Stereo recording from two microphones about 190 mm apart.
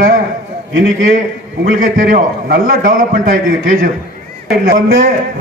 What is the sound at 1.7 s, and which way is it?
A man's voice, 50° right (ahead or behind).